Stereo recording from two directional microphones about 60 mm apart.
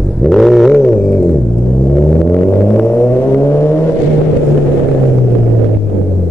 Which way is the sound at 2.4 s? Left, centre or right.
Left.